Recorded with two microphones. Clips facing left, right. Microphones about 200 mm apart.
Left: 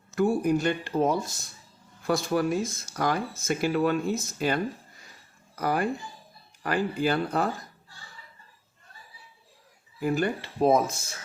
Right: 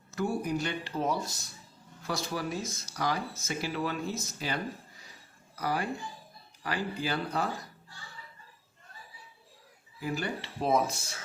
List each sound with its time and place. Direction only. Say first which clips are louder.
0.2 s speech: left 7 dB; 50° left (ahead or behind)
10.0 s speech: left 7 dB; 55° left (ahead or behind)